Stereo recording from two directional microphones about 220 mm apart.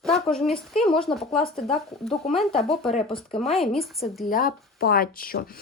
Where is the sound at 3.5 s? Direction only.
Centre (ahead or behind).